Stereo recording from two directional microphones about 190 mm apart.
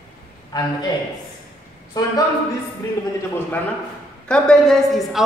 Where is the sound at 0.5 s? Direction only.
20° left (ahead or behind).